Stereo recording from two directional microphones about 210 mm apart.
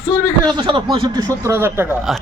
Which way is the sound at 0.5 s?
20° right (ahead or behind).